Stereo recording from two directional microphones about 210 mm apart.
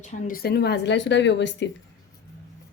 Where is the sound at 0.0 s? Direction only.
40° left (ahead or behind); by 1.6 s 55° left (ahead or behind).